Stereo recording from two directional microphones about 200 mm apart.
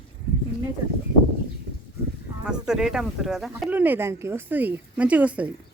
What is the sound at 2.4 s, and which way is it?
Speech, 5° right (ahead or behind).